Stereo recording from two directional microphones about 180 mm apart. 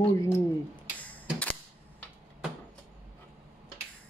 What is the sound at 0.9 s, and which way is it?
Typewriter, 10° left (ahead or behind).